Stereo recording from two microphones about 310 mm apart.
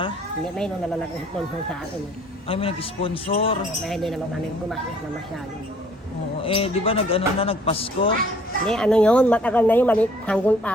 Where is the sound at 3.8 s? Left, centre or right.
Centre.